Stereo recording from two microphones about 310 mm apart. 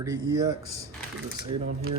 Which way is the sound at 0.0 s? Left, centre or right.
Centre.